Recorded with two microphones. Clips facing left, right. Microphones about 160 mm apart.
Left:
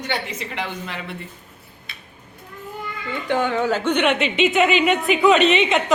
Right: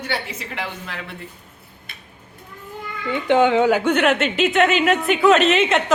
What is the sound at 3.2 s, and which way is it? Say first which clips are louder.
A woman's voice: right 6 dB; 20° right (ahead or behind).